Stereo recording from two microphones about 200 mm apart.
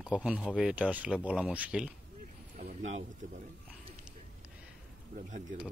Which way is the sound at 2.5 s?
35° right (ahead or behind).